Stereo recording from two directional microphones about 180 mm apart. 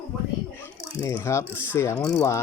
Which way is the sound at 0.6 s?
15° left (ahead or behind).